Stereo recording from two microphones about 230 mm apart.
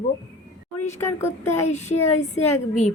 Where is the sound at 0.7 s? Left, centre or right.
Centre.